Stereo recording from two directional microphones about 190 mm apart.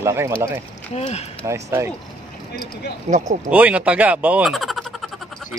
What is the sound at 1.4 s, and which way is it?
Speech, 15° right (ahead or behind).